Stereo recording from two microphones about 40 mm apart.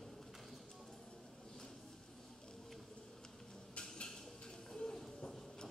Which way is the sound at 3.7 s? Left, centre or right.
Left.